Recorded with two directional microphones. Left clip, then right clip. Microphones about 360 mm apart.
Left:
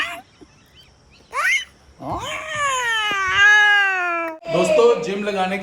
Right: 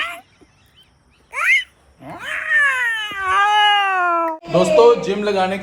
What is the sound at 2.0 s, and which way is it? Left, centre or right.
Cat, centre.